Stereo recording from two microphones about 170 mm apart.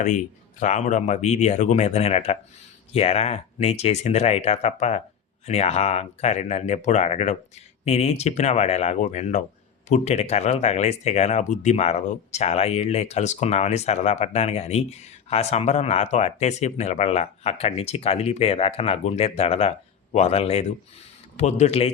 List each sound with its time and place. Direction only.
0.6 s speech: 45° left (ahead or behind)